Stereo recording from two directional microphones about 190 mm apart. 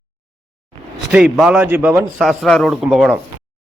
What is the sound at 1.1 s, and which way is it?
A man's voice, 5° right (ahead or behind).